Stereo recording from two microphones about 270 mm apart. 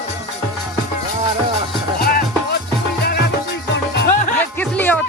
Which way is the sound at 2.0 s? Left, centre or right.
Left.